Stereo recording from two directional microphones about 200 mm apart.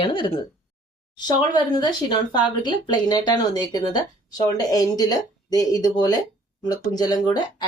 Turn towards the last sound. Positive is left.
turn(degrees=20)  # may be behind; listen again after turning